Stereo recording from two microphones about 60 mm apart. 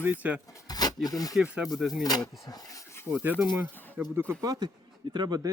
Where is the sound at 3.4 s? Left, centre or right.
Right.